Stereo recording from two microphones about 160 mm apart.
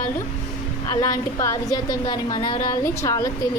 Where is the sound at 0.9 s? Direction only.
20° left (ahead or behind).